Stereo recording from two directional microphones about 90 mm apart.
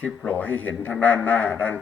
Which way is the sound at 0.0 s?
20° left (ahead or behind).